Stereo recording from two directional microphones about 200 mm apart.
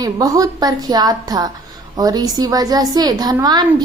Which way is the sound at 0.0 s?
20° right (ahead or behind).